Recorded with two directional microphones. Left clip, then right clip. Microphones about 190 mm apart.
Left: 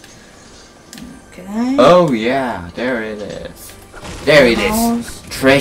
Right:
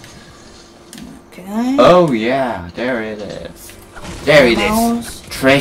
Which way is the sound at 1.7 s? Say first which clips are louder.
Even; 10° left (ahead or behind).